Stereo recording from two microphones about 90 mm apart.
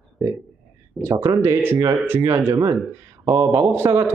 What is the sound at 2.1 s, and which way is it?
Speech, 40° right (ahead or behind).